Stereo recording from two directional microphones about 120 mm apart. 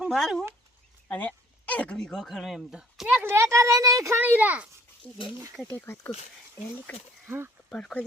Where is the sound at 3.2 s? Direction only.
20° right (ahead or behind).